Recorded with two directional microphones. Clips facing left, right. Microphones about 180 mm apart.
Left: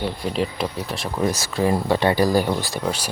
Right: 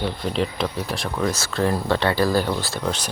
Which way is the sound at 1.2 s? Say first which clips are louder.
Left 2 dB; 15° left (ahead or behind).